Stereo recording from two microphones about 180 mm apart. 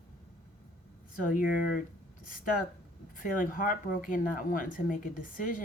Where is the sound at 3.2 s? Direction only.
50° left (ahead or behind).